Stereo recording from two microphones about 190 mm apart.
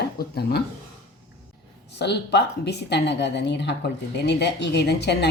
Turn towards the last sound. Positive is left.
turn(degrees=60)  # may be behind; listen again after turning